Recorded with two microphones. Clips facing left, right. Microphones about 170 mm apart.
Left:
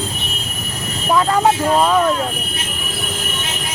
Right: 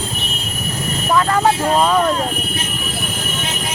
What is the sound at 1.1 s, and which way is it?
Speech, 10° left (ahead or behind).